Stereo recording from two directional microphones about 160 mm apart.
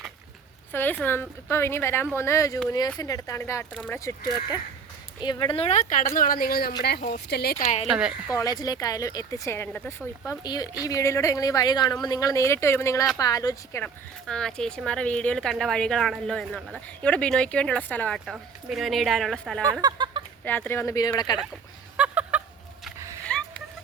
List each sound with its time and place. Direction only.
0.7 s a woman's voice: 10° left (ahead or behind)
4.3 s speech: 25° left (ahead or behind)
5.5 s speech: 40° left (ahead or behind)
6.1 s a woman's voice: 65° left (ahead or behind)
7.3 s speech: 85° left
7.6 s a woman's voice: 40° left (ahead or behind)
7.9 s speech: 5° right (ahead or behind)
8.3 s speech: 20° left (ahead or behind)
10.4 s speech: 25° left (ahead or behind)
13.8 s speech: 5° left (ahead or behind)
19.8 s a sound: 25° right (ahead or behind)
20.4 s a woman's voice: 10° left (ahead or behind)
21.9 s fowl: 10° right (ahead or behind)
23.2 s a sound: 10° left (ahead or behind)